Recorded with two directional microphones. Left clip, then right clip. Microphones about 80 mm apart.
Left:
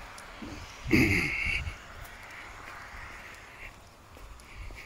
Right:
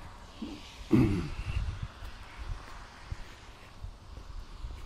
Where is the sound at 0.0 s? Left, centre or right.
Centre.